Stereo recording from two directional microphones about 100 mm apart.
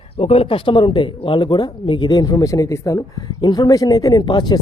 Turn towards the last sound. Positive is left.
turn(degrees=50)  # may be behind; listen again after turning